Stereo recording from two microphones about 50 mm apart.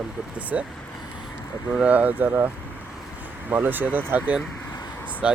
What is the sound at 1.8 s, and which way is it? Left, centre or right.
Speech, right.